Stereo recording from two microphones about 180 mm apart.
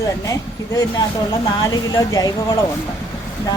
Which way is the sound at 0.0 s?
20° left (ahead or behind).